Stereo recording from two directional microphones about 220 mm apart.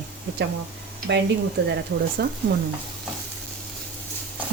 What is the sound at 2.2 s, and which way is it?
Speech, 45° right (ahead or behind).